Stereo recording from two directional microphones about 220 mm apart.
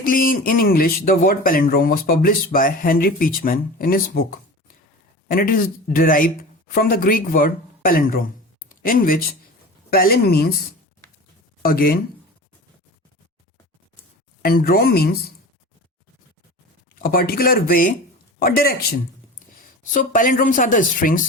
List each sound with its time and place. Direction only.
0.0 s a man's voice: 40° left (ahead or behind)
14.4 s speech: 40° left (ahead or behind)
16.9 s a man's voice: 40° left (ahead or behind)
19.9 s a man's voice: 40° left (ahead or behind)